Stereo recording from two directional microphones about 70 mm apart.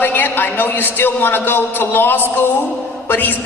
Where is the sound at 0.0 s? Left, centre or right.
Left.